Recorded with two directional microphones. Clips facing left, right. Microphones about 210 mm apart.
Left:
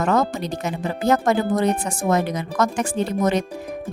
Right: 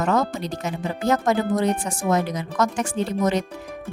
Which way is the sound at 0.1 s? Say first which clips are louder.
Left 2 dB; 55° left (ahead or behind).